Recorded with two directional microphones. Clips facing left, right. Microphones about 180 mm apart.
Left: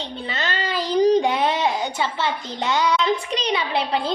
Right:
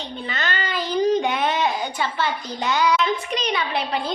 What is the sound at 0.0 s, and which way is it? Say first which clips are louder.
A child's voice: left 1 dB; 30° left (ahead or behind).